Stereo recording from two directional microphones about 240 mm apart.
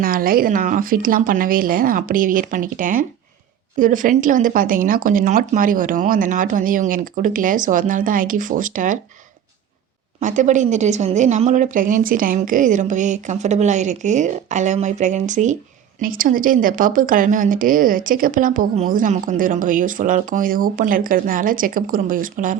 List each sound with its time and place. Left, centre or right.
0.0 s a woman's voice: right
10.2 s a woman's voice: right